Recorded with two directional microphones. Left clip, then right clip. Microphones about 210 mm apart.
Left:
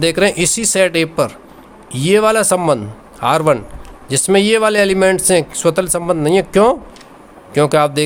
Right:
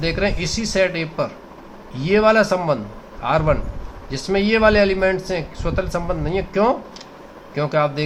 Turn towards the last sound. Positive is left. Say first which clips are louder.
# left 7 dB
turn(degrees=55)  # may be behind; listen again after turning